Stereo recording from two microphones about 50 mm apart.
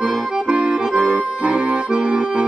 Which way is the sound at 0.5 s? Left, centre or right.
Centre.